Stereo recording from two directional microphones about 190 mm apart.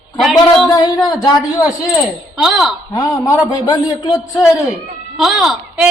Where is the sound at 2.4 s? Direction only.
Centre (ahead or behind).